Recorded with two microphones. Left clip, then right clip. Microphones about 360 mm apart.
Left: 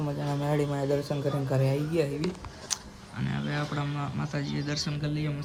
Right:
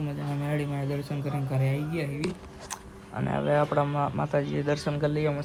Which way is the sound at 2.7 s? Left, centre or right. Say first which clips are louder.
Left 6 dB; centre.